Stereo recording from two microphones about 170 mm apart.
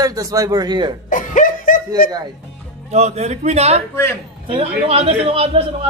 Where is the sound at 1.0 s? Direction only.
50° left (ahead or behind).